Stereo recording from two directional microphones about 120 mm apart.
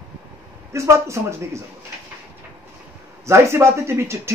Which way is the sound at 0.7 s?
25° right (ahead or behind).